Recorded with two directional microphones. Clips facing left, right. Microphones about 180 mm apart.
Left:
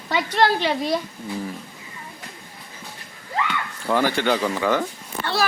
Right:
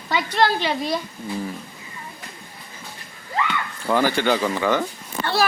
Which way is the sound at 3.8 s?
Centre (ahead or behind).